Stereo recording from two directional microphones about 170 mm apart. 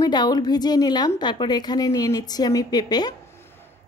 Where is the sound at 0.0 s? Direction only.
25° left (ahead or behind).